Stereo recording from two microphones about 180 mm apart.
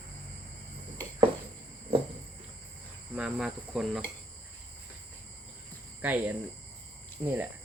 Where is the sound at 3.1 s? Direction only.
5° right (ahead or behind).